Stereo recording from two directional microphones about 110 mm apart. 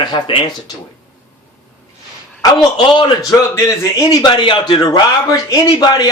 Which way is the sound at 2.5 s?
40° left (ahead or behind).